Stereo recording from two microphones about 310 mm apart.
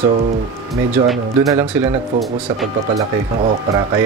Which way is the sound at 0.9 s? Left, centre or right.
Centre.